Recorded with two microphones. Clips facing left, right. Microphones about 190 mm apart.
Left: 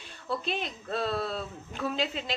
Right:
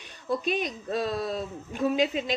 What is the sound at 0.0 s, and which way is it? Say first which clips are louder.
Speech: right 5 dB; 15° right (ahead or behind).